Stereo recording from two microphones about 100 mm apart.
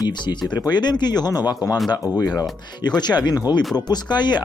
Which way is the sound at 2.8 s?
45° left (ahead or behind).